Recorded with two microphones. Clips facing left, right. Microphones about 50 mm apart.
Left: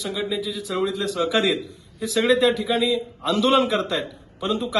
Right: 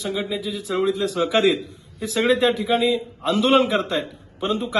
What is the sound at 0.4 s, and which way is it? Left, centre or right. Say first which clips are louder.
A man's voice: right 3 dB; right.